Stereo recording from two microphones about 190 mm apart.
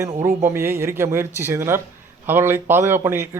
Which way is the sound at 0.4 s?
15° right (ahead or behind).